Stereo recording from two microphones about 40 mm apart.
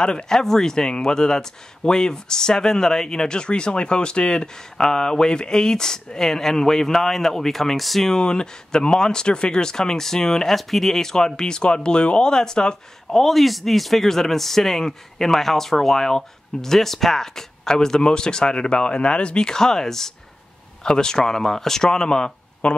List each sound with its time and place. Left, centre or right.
0.0 s speech: centre
8.1 s speech: centre
10.5 s speech: centre
13.1 s speech: centre